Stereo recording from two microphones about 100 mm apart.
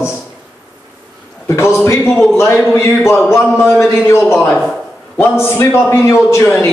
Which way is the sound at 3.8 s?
30° left (ahead or behind).